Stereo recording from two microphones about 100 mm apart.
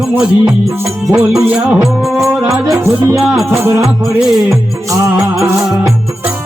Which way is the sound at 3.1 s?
Centre (ahead or behind).